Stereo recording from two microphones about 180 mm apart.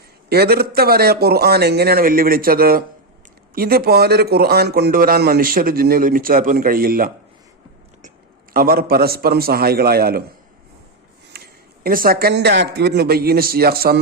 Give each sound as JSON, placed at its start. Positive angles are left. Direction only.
{"t": 0.3, "sound": "a man's voice", "side_deg": -60}
{"t": 8.5, "sound": "a man's voice", "side_deg": -55}
{"t": 11.3, "sound": "a man's voice", "side_deg": -55}